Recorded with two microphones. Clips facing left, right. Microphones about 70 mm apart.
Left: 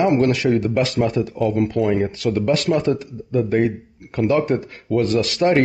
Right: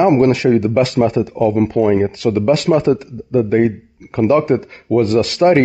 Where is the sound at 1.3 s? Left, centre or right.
Centre.